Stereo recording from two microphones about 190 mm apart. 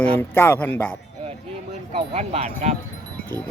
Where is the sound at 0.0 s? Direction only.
10° left (ahead or behind).